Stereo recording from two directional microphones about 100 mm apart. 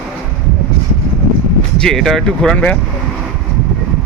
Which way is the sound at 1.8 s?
5° left (ahead or behind).